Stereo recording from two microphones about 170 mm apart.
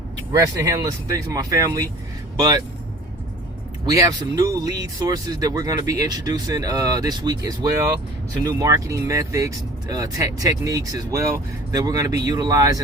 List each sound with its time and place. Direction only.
0.3 s speech: 20° right (ahead or behind)
3.8 s speech: 20° right (ahead or behind)